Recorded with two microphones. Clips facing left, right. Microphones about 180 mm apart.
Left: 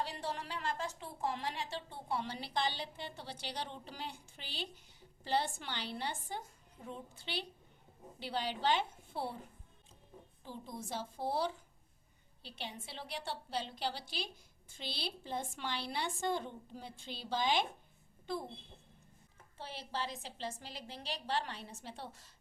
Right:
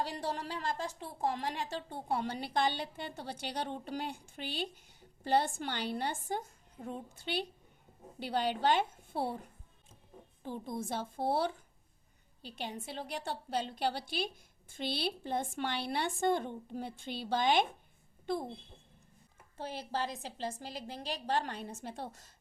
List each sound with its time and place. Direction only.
0.0 s a woman's voice: 35° right (ahead or behind)
10.4 s a woman's voice: 55° right (ahead or behind)
12.4 s a woman's voice: 45° right (ahead or behind)
19.5 s a woman's voice: 45° right (ahead or behind)